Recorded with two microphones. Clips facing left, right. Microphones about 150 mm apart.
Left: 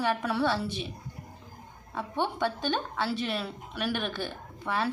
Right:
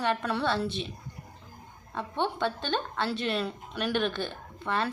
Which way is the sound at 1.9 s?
5° left (ahead or behind).